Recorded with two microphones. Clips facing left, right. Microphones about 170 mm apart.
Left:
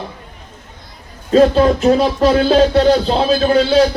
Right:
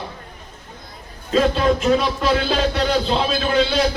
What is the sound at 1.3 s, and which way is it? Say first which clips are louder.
Music: left 7 dB; 40° left (ahead or behind).